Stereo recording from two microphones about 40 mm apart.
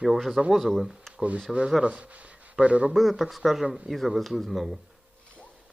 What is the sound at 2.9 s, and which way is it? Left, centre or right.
Speech, centre.